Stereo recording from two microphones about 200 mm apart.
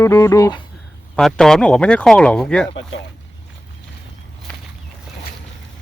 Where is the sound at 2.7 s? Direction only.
25° left (ahead or behind).